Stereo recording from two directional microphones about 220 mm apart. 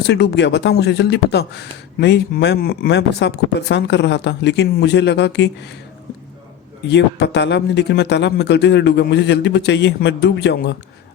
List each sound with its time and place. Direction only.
0.1 s speech: 50° left (ahead or behind)
6.8 s speech: 50° left (ahead or behind)